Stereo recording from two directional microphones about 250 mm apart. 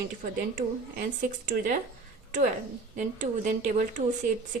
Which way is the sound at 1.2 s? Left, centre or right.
Right.